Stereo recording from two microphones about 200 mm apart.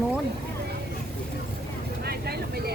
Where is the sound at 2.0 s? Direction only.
50° right (ahead or behind).